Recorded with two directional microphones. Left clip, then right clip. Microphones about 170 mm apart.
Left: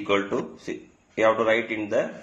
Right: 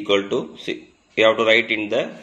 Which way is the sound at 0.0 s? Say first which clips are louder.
Right 4 dB; 20° right (ahead or behind).